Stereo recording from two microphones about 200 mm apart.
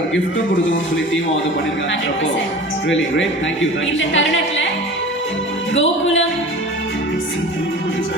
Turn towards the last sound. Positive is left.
turn(degrees=70)  # may be behind; listen again after turning